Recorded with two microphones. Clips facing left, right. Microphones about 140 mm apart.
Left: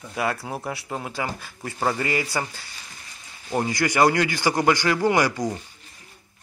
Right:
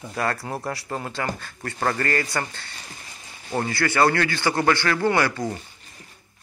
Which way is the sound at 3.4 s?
15° left (ahead or behind).